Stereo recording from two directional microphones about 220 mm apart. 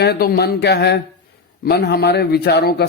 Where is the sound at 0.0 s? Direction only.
45° left (ahead or behind).